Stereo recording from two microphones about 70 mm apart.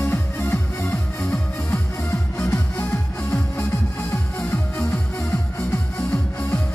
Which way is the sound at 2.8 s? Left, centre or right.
Left.